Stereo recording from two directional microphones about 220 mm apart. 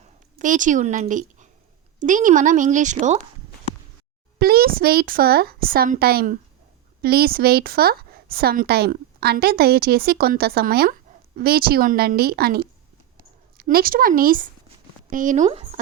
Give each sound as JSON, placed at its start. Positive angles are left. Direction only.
{"t": 0.0, "sound": "a woman's voice", "side_deg": -35}
{"t": 4.4, "sound": "a woman's voice", "side_deg": -45}